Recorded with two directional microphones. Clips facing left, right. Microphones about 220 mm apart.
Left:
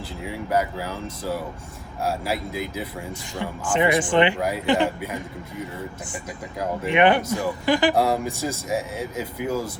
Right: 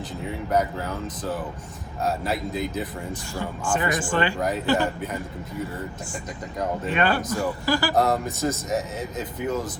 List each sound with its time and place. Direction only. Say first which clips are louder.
0.5 s a man's voice: even; 5° left (ahead or behind)
2.0 s a man's voice: even; 10° left (ahead or behind)
3.1 s speech: even; 20° left (ahead or behind)
4.4 s a man's voice: left 1 dB; 10° left (ahead or behind)
6.9 s a man's voice: left 6 dB; 20° left (ahead or behind)